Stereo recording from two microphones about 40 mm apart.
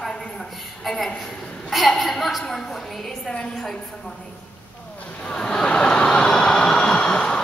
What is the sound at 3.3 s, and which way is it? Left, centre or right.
Speech, left.